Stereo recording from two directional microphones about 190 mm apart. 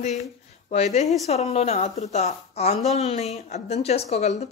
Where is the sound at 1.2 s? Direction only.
35° left (ahead or behind).